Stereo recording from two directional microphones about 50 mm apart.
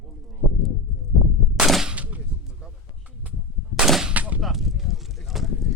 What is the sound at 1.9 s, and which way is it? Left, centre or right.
Gunshot, right.